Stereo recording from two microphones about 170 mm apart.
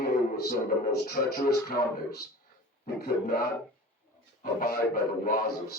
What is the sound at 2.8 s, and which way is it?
Speech, 60° left (ahead or behind).